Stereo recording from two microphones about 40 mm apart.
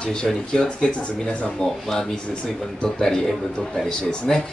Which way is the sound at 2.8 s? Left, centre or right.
Centre.